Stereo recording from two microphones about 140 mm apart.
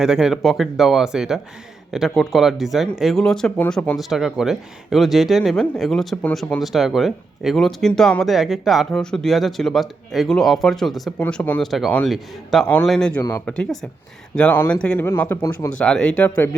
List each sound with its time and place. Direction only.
0.0 s speech: 5° right (ahead or behind)